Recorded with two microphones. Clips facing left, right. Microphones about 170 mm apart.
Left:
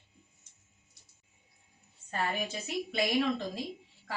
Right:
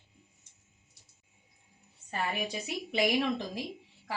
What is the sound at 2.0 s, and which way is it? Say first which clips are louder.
A woman's voice: even; 15° right (ahead or behind).